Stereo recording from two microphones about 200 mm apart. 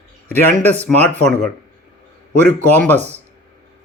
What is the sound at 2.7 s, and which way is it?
Speech, 10° left (ahead or behind).